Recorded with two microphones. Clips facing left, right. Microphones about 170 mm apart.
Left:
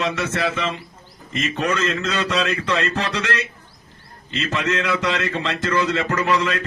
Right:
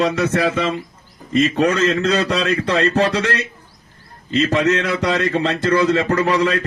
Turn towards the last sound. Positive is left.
turn(degrees=-40)  # may be behind; listen again after turning